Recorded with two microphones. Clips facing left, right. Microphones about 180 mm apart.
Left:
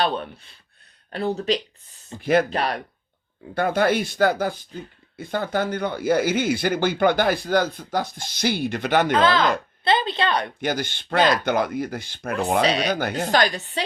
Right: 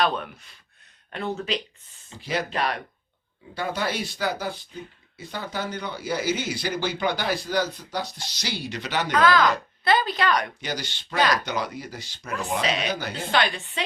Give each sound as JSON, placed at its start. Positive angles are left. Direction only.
{"t": 0.0, "sound": "speech", "side_deg": 35}
{"t": 2.0, "sound": "speech", "side_deg": 55}
{"t": 2.5, "sound": "speech", "side_deg": 35}
{"t": 3.5, "sound": "speech", "side_deg": 55}
{"t": 9.1, "sound": "a woman's voice", "side_deg": 25}
{"t": 10.6, "sound": "speech", "side_deg": 55}
{"t": 12.6, "sound": "speech", "side_deg": 35}
{"t": 12.9, "sound": "speech", "side_deg": 55}